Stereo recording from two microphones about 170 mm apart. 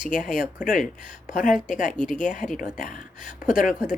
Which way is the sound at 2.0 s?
50° left (ahead or behind).